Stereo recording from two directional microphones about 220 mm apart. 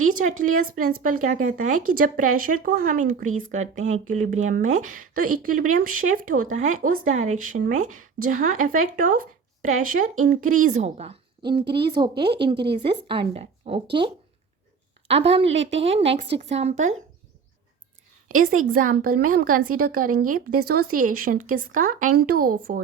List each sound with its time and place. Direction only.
0.5 s a woman's voice: 40° right (ahead or behind)
12.5 s speech: 50° right (ahead or behind)
12.8 s speech: 25° right (ahead or behind)
15.0 s a woman's voice: 25° right (ahead or behind)
18.3 s a woman's voice: 35° right (ahead or behind)